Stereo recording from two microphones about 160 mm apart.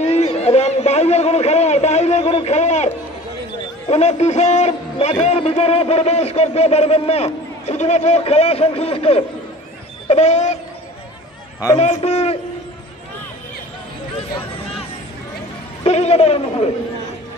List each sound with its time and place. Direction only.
0.0 s a sound: 45° left (ahead or behind)
3.9 s a man's voice: 45° left (ahead or behind)
11.8 s a man's voice: 45° left (ahead or behind)
15.8 s speech: 45° left (ahead or behind)